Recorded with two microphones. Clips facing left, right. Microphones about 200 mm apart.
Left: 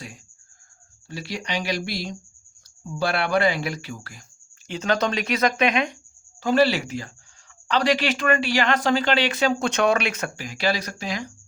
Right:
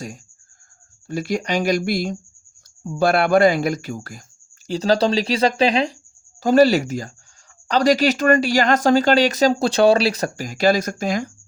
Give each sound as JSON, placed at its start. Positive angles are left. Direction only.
{"t": 1.0, "sound": "speech", "side_deg": -50}
{"t": 6.4, "sound": "speech", "side_deg": -40}